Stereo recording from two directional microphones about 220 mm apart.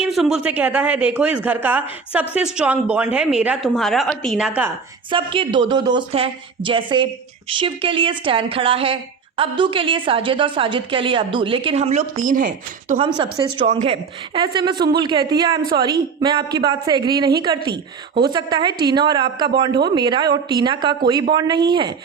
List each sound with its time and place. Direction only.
0.0 s a man's voice: centre (ahead or behind)
5.1 s a woman's voice: 20° right (ahead or behind); by 13.0 s 40° right (ahead or behind)
13.3 s a woman's voice: 25° right (ahead or behind)